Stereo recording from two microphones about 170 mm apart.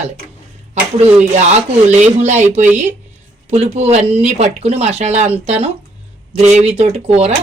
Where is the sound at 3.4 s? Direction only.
40° right (ahead or behind).